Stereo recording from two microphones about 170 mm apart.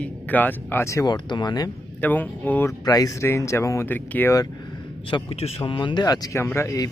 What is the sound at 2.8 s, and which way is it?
Speech, 20° left (ahead or behind).